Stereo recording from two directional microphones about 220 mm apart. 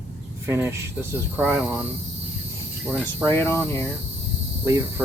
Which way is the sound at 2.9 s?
5° right (ahead or behind).